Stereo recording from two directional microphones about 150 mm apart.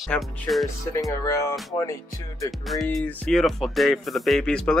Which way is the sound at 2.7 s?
Centre (ahead or behind).